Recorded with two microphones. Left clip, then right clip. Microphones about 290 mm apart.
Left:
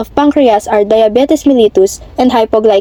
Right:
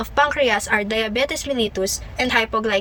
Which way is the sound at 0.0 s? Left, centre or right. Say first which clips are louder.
Left 9 dB; centre.